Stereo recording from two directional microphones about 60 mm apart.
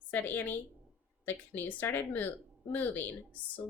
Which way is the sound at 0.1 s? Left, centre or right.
Left.